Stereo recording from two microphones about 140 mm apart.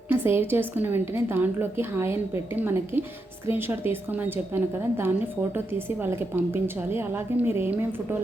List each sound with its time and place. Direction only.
0.1 s a woman's voice: 15° right (ahead or behind)